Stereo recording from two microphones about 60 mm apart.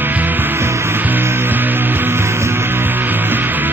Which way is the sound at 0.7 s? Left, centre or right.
Right.